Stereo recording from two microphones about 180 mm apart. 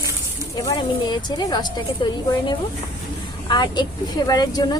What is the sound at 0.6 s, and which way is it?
Speech, 25° left (ahead or behind).